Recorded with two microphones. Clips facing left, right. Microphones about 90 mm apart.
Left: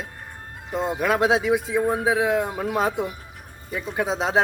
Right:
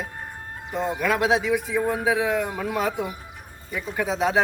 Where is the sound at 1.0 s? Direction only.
25° left (ahead or behind).